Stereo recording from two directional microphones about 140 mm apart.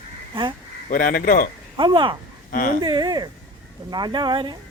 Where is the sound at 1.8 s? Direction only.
35° right (ahead or behind).